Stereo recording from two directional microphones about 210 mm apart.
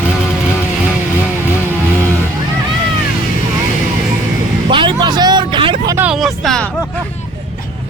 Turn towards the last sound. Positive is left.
turn(degrees=0)  # may be behind; listen again after turning